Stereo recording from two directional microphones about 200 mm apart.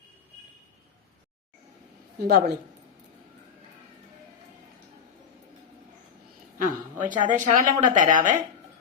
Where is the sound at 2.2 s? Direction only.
55° right (ahead or behind).